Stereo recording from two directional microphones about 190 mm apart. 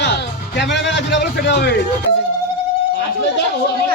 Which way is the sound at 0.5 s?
65° left (ahead or behind).